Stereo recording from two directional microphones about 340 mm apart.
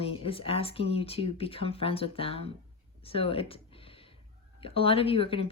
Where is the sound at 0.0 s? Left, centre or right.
Centre.